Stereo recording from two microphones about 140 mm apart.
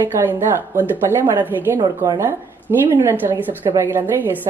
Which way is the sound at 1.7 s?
25° right (ahead or behind).